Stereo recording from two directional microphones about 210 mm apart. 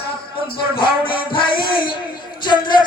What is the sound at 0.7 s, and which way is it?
Speech, 25° left (ahead or behind).